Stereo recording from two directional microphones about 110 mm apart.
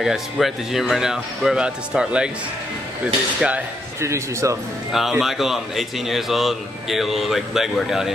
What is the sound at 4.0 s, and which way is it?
Speech, 25° right (ahead or behind).